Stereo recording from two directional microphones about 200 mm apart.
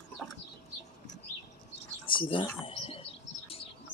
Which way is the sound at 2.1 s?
25° left (ahead or behind).